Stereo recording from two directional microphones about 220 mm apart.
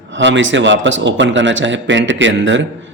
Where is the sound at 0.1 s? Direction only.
55° right (ahead or behind).